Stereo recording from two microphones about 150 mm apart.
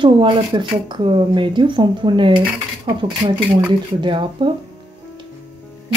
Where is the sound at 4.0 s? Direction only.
35° right (ahead or behind).